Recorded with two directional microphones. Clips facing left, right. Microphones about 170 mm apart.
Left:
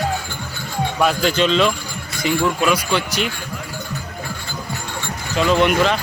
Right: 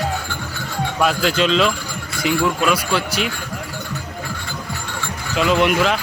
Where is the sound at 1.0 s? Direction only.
Centre (ahead or behind).